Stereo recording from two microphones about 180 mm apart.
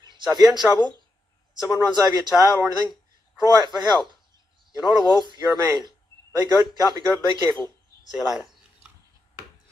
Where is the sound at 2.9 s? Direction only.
20° left (ahead or behind).